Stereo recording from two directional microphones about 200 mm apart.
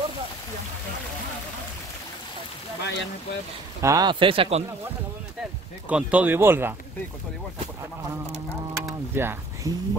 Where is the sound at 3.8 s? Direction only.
20° right (ahead or behind).